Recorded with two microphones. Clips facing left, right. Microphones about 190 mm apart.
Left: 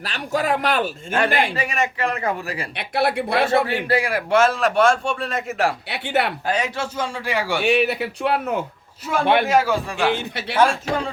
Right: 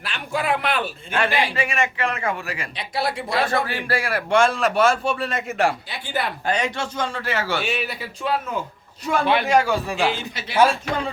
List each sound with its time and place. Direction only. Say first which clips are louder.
0.0 s speech: left 3 dB; 40° left (ahead or behind)
1.5 s speech: even; 40° left (ahead or behind)
2.7 s a man's voice: left 5 dB; 60° left (ahead or behind)
3.4 s a man's voice: left 5 dB; 25° left (ahead or behind)
4.3 s a man's voice: even; 5° left (ahead or behind)
5.9 s speech: left 5 dB; 70° left (ahead or behind)
6.4 s a man's voice: even; 5° left (ahead or behind)
7.6 s a man's voice: left 8 dB; 65° left (ahead or behind)
9.5 s a man's voice: even; 5° left (ahead or behind)
10.1 s a man's voice: left 4 dB; 60° left (ahead or behind)